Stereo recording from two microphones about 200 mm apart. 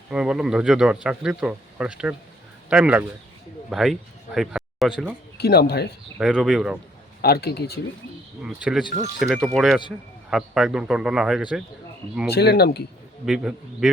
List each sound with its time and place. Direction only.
0.1 s a man's voice: 5° right (ahead or behind)
5.4 s speech: 55° left (ahead or behind)
6.1 s a man's voice: 5° right (ahead or behind)
7.2 s speech: 50° left (ahead or behind)
8.4 s a man's voice: centre (ahead or behind)
12.3 s speech: 55° left (ahead or behind)
13.2 s a man's voice: 5° right (ahead or behind)